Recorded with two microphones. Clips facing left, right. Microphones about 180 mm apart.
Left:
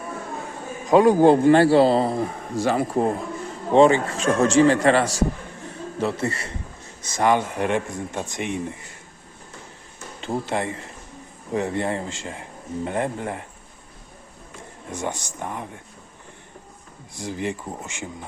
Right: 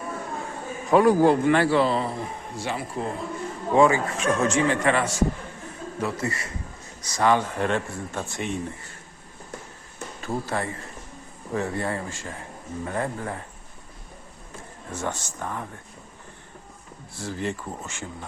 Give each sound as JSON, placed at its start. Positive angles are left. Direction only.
{"t": 0.9, "sound": "a man's voice", "side_deg": 20}
{"t": 3.7, "sound": "a man's voice", "side_deg": 30}
{"t": 10.2, "sound": "speech", "side_deg": 20}
{"t": 14.8, "sound": "speech", "side_deg": 15}
{"t": 17.2, "sound": "speech", "side_deg": 15}